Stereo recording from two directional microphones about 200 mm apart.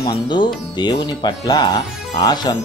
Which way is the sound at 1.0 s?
20° left (ahead or behind).